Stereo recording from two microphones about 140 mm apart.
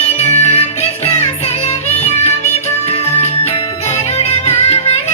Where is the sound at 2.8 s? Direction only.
45° left (ahead or behind).